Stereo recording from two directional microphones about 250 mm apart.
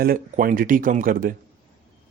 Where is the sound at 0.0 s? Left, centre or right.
Right.